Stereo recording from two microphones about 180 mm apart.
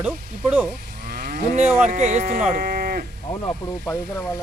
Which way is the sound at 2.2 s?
55° right (ahead or behind).